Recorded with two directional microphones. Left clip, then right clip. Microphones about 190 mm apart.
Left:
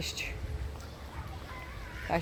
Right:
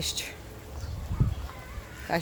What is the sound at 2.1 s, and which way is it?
Speech, 10° right (ahead or behind).